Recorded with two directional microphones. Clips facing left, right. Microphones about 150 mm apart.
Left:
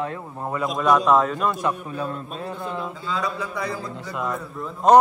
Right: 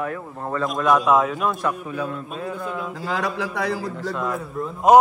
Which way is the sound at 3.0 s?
85° right.